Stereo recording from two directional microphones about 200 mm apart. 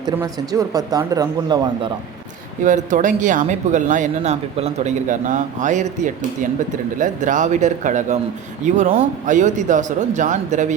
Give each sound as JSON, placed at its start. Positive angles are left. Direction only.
{"t": 0.0, "sound": "speech", "side_deg": -15}
{"t": 2.6, "sound": "speech", "side_deg": -40}